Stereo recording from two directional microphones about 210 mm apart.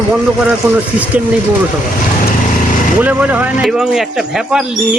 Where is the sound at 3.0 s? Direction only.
5° right (ahead or behind).